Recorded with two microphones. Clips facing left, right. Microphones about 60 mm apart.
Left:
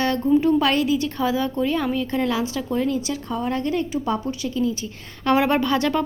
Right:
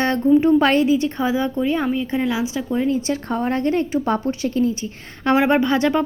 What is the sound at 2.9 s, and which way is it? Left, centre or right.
Speech, right.